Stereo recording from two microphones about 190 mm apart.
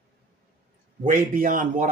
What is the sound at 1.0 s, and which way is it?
Speech, 45° right (ahead or behind).